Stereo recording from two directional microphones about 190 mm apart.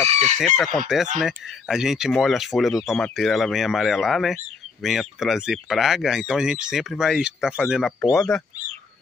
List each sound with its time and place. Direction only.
0.1 s chicken: 35° right (ahead or behind)
0.4 s speech: centre (ahead or behind)